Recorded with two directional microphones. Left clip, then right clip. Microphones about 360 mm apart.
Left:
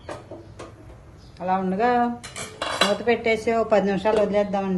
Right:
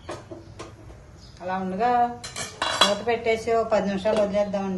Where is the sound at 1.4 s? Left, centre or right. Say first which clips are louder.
Left 3 dB; left.